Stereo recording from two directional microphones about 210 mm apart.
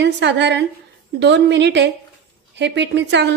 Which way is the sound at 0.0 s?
55° right (ahead or behind).